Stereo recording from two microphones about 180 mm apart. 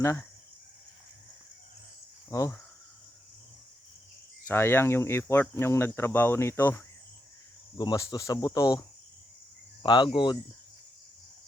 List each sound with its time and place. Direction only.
2.3 s speech: 15° left (ahead or behind)
4.4 s speech: 15° left (ahead or behind)
9.8 s speech: 25° left (ahead or behind)